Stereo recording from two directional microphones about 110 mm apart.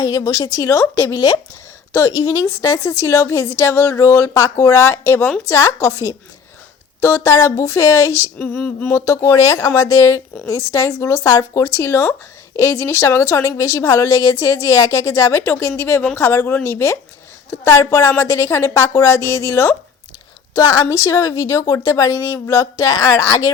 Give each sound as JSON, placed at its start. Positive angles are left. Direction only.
{"t": 0.0, "sound": "speech", "side_deg": 35}
{"t": 7.0, "sound": "speech", "side_deg": 25}
{"t": 8.4, "sound": "a sound", "side_deg": 15}
{"t": 9.0, "sound": "speech", "side_deg": 30}
{"t": 20.9, "sound": "speech", "side_deg": 30}